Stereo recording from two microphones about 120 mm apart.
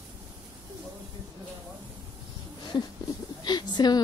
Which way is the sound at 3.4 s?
35° left (ahead or behind).